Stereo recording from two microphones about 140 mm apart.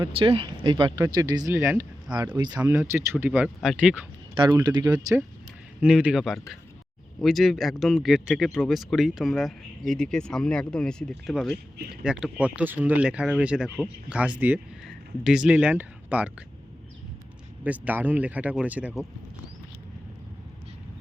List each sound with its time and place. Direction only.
0.0 s speech: 40° right (ahead or behind); by 1.9 s 20° right (ahead or behind)
2.3 s speech: 30° right (ahead or behind)
2.6 s speech: 15° right (ahead or behind)
4.4 s speech: 30° right (ahead or behind)
5.8 s speech: 10° right (ahead or behind)
17.6 s speech: 10° right (ahead or behind)